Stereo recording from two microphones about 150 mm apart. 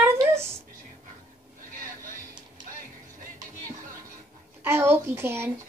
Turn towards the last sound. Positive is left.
turn(degrees=-15)  # may be behind; listen again after turning